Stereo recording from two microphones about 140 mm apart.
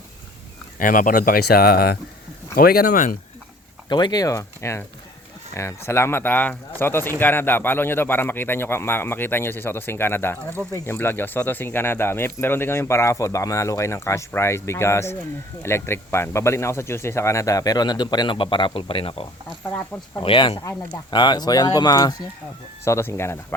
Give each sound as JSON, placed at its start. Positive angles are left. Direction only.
{"t": 0.8, "sound": "speech", "side_deg": 75}
{"t": 3.8, "sound": "a man's voice", "side_deg": 30}